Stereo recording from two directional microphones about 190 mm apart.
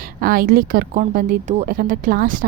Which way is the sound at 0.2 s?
50° right (ahead or behind).